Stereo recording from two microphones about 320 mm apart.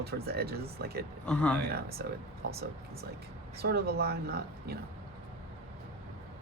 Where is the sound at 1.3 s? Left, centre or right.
Centre.